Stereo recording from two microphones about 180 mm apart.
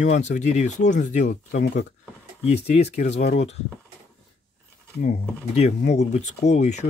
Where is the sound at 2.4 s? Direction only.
40° left (ahead or behind).